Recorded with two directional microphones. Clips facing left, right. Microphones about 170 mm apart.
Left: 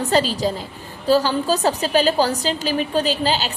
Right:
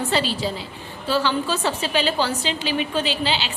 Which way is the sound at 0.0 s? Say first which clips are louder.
Left 4 dB; 40° left (ahead or behind).